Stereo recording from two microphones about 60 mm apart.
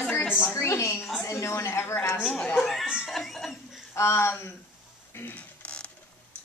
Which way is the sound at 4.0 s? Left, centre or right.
Left.